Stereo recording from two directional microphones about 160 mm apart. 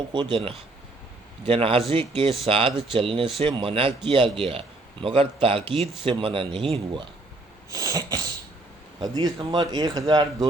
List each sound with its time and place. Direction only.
0.1 s speech: 30° right (ahead or behind)
7.7 s sneeze: 20° right (ahead or behind)
9.0 s speech: 25° right (ahead or behind)